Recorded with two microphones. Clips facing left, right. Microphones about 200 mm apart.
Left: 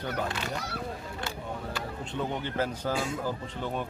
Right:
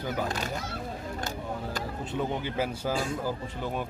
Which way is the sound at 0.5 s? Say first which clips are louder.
Even; 70° left (ahead or behind).